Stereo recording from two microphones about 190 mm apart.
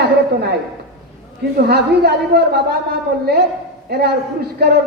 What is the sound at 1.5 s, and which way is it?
Speech, 55° right (ahead or behind).